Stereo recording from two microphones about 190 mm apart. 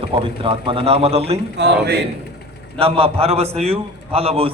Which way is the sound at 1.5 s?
65° right (ahead or behind).